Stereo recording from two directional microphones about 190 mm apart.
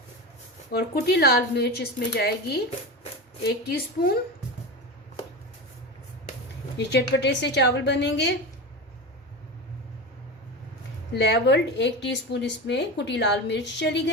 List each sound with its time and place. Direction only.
0.7 s a woman's voice: 55° left (ahead or behind)
6.7 s a woman's voice: 65° left (ahead or behind)
11.2 s a woman's voice: 65° left (ahead or behind)